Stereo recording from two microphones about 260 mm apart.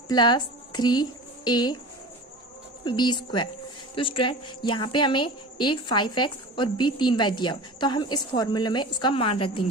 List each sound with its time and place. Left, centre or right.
0.1 s a woman's voice: centre
2.8 s a woman's voice: centre